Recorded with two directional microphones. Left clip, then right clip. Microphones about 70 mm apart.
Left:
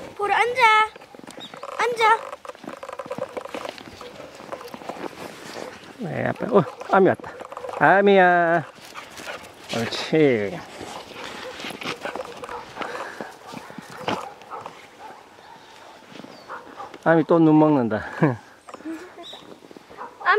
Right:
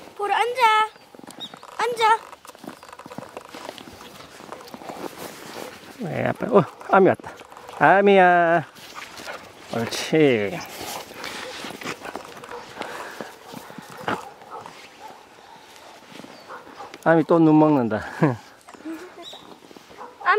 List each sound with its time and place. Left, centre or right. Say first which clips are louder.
0.2 s a sound: left 1 dB; centre
1.8 s speech: left 1 dB; centre
4.6 s a sound: left 1 dB; right
5.6 s speech: even; right
8.9 s dog: even; centre
9.8 s speech: even; right
10.3 s speech: right 1 dB; right
10.9 s dog: right 2 dB; right
11.9 s clip-clop: left 2 dB; right
12.8 s dog: left 2 dB; centre
17.0 s speech: even; right
18.9 s dog: even; right